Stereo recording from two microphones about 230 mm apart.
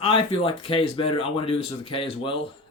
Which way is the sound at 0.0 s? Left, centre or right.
Left.